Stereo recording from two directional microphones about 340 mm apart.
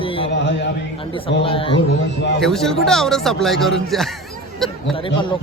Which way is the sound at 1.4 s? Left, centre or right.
Centre.